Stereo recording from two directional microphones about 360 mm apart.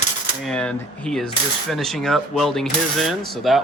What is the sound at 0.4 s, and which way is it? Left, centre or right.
Speech, centre.